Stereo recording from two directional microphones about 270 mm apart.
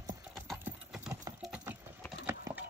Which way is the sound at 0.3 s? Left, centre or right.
Centre.